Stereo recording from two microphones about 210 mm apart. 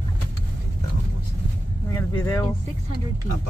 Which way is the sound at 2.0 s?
15° left (ahead or behind).